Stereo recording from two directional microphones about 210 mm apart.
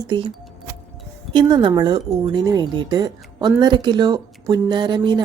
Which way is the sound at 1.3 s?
20° right (ahead or behind).